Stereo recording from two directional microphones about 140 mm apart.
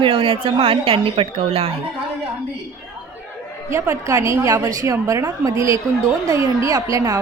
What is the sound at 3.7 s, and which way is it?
A woman's voice, 20° right (ahead or behind).